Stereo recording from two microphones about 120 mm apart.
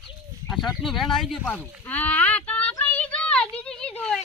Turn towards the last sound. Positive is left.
turn(degrees=5)  # may be behind; listen again after turning